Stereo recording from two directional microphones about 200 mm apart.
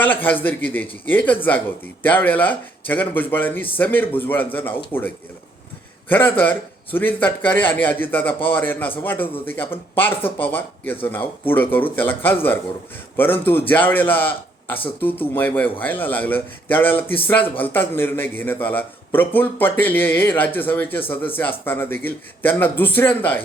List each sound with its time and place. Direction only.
0.0 s speech: 10° left (ahead or behind)